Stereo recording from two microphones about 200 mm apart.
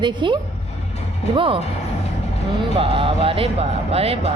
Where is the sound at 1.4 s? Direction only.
25° right (ahead or behind).